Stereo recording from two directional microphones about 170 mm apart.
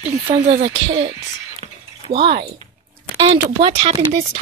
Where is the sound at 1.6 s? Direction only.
35° right (ahead or behind).